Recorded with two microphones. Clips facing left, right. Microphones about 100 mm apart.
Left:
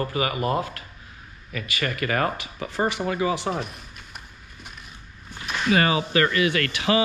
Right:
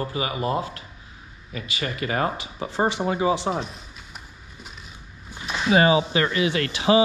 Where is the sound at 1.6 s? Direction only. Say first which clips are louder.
Left 2 dB; 60° left (ahead or behind).